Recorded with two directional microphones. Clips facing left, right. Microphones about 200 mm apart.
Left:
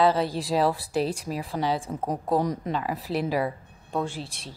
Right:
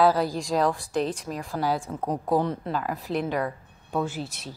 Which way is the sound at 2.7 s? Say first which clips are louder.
Even; centre (ahead or behind).